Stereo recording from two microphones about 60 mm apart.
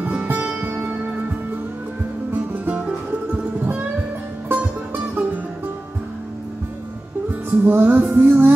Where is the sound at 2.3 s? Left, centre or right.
Right.